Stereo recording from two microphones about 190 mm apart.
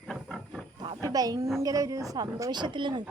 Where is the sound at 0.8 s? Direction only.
25° right (ahead or behind).